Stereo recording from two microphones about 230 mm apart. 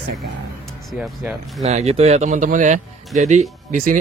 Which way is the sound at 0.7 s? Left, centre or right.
Centre.